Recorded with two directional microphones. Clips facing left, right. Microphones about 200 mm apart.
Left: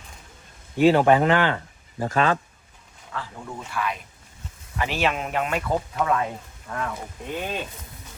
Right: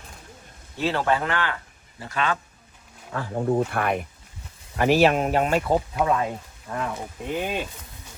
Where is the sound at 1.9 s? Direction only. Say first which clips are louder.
Left 5 dB; 45° left (ahead or behind).